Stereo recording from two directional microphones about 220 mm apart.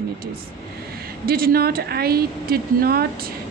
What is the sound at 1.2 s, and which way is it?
A woman's voice, 40° right (ahead or behind).